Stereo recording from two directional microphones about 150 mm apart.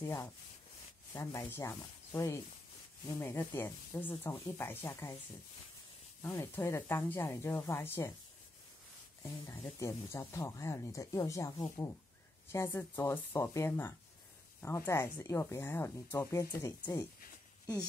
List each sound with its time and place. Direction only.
0.0 s speech: 15° left (ahead or behind)
6.3 s speech: 20° left (ahead or behind)
9.5 s speech: 20° left (ahead or behind)